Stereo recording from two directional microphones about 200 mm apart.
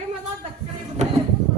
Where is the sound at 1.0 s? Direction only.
35° right (ahead or behind).